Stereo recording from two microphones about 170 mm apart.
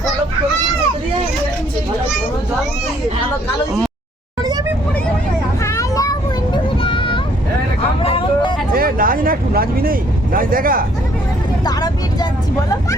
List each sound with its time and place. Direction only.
5.6 s a sound: 20° left (ahead or behind)
8.0 s vehicle: 30° left (ahead or behind)
8.7 s vehicle: 60° right (ahead or behind)
11.6 s vehicle: 25° left (ahead or behind)